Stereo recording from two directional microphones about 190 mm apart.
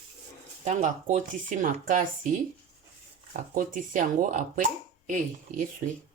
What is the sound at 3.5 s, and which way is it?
Speech, 45° right (ahead or behind).